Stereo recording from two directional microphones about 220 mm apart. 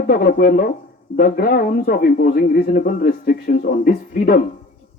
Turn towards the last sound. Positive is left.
turn(degrees=40)  # may be behind; listen again after turning